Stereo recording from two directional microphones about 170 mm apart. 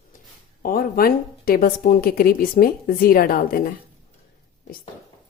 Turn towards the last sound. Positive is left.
turn(degrees=60)  # may be behind; listen again after turning